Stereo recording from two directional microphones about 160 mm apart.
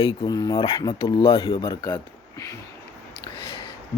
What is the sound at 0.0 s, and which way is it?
Speech, 30° left (ahead or behind).